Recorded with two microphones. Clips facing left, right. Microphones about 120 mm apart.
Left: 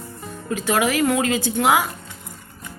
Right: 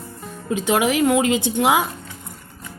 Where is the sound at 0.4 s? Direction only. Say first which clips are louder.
Right 2 dB; 20° right (ahead or behind).